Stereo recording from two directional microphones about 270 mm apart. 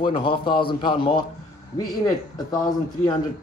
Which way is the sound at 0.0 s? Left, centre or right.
Centre.